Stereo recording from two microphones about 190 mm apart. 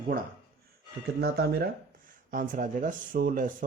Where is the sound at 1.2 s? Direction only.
55° right (ahead or behind).